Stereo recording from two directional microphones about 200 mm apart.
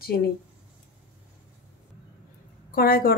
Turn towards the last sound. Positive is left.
turn(degrees=50)  # may be behind; listen again after turning